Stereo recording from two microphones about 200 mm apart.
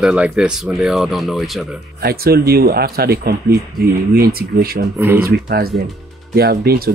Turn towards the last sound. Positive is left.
turn(degrees=-50)  # may be behind; listen again after turning